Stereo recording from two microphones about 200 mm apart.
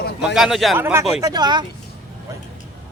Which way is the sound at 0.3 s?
Centre (ahead or behind).